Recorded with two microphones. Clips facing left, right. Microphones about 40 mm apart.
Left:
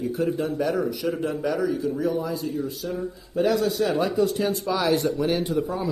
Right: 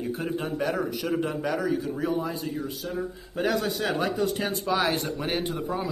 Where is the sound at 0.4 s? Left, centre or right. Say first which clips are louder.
Left 3 dB; centre.